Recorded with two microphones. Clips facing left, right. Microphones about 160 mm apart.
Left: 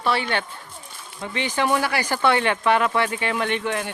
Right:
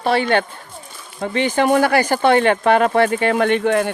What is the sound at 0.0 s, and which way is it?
Speech, 50° right (ahead or behind).